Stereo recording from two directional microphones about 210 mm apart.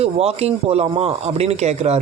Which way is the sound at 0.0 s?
30° right (ahead or behind).